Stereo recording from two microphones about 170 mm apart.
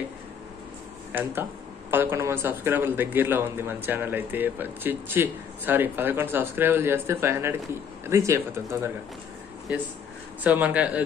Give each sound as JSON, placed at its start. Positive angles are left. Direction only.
{"t": 1.1, "sound": "speech", "side_deg": -15}
{"t": 10.4, "sound": "speech", "side_deg": -10}